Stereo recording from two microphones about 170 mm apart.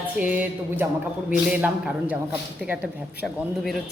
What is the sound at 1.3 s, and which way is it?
A woman's voice, 5° right (ahead or behind).